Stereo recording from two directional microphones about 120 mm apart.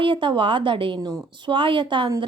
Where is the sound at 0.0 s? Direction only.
45° right (ahead or behind).